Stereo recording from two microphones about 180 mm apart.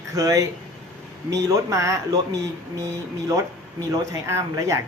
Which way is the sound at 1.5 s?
15° right (ahead or behind).